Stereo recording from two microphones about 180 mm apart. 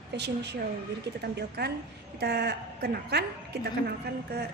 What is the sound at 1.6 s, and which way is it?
A woman's voice, 65° right (ahead or behind).